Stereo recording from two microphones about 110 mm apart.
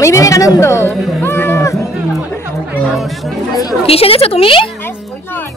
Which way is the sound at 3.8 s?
60° left (ahead or behind).